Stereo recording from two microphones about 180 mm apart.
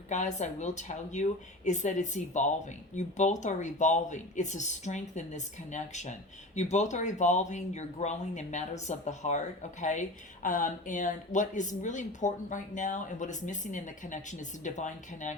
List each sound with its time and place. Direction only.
0.1 s speech: 40° left (ahead or behind)